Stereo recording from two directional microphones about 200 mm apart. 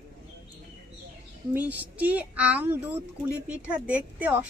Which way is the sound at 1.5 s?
10° right (ahead or behind).